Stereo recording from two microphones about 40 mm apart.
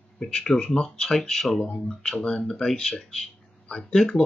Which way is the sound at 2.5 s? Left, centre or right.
Centre.